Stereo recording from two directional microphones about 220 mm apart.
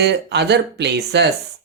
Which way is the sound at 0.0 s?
50° right (ahead or behind).